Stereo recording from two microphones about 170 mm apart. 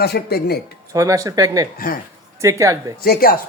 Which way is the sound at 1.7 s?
55° left (ahead or behind).